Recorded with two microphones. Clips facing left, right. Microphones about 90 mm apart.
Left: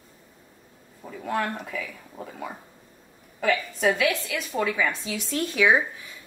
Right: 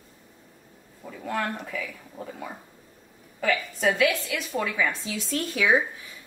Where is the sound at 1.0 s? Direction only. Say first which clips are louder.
Left 2 dB; 15° left (ahead or behind).